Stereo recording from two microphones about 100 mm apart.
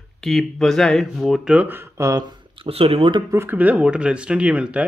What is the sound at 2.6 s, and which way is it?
Speech, 75° right (ahead or behind).